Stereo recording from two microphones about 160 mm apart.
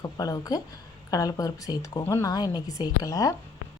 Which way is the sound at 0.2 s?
20° left (ahead or behind).